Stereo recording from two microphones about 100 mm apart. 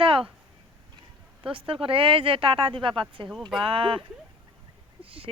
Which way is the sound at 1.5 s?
65° right (ahead or behind).